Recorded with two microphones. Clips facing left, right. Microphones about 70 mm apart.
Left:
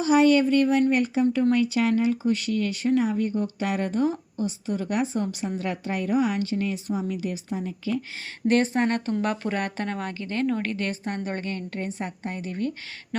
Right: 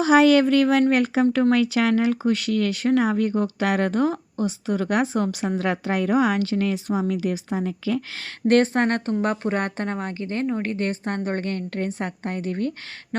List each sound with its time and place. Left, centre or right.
0.0 s a woman's voice: right
8.4 s a woman's voice: right
9.2 s a woman's voice: right